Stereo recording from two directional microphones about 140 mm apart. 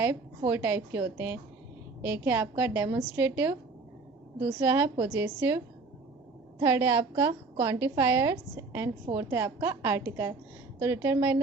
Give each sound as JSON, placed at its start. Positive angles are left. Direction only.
{"t": 0.0, "sound": "a woman's voice", "side_deg": -10}